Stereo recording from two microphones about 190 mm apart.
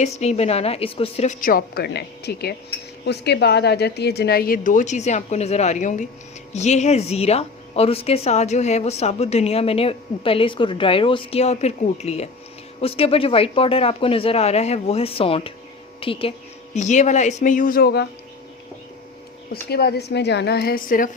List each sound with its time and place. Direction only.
0.0 s a woman's voice: 35° left (ahead or behind); by 18.0 s 55° left (ahead or behind)
19.7 s a woman's voice: 55° left (ahead or behind)